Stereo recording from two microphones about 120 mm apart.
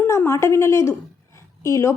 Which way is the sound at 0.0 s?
20° left (ahead or behind).